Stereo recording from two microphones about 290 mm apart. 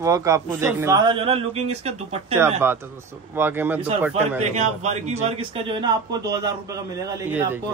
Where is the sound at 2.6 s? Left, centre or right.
Centre.